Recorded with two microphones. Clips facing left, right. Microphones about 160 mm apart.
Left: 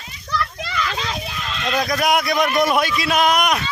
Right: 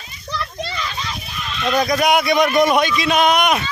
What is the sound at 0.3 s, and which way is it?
Children playing, 10° right (ahead or behind).